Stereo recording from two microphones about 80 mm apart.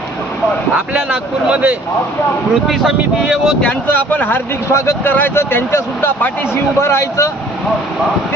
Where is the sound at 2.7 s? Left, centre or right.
Centre.